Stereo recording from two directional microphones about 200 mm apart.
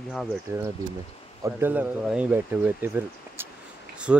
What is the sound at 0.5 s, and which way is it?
Speech, 10° right (ahead or behind).